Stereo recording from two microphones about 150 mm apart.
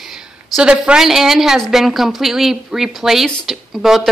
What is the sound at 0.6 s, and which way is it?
A woman's voice, 5° right (ahead or behind).